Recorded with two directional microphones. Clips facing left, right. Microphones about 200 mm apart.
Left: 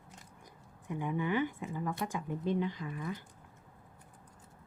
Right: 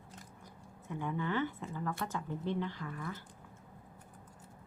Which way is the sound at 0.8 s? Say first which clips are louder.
Left 3 dB; 15° left (ahead or behind).